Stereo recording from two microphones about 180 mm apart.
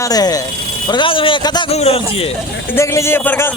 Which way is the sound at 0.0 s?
20° left (ahead or behind).